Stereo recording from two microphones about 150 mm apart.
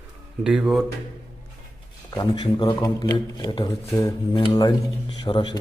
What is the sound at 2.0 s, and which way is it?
Speech, 30° left (ahead or behind).